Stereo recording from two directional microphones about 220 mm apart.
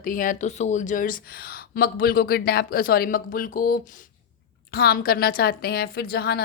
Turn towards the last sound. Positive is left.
turn(degrees=45)  # may be behind; listen again after turning